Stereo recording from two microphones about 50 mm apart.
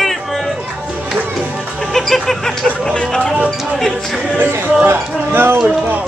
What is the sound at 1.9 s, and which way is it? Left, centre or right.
Music, centre.